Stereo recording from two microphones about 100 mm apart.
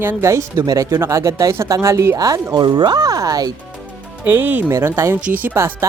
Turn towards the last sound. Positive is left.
turn(degrees=-20)  # may be behind; listen again after turning